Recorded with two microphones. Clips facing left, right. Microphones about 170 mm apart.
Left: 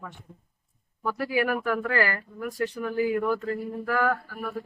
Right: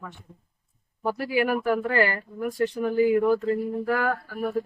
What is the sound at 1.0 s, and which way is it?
Speech, 30° right (ahead or behind).